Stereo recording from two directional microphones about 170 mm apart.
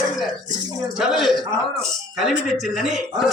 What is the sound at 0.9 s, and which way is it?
A man's voice, centre (ahead or behind).